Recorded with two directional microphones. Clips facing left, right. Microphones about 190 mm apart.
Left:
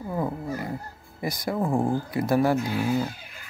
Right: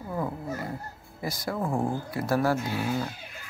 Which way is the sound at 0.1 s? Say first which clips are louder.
Left 2 dB; 15° left (ahead or behind).